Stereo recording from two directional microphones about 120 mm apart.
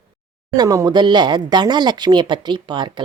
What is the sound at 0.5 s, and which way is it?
Speech, 30° right (ahead or behind).